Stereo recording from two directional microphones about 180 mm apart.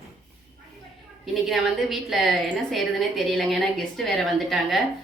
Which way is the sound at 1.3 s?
Centre (ahead or behind).